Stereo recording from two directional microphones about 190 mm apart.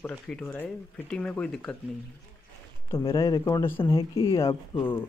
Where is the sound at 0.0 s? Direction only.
10° left (ahead or behind).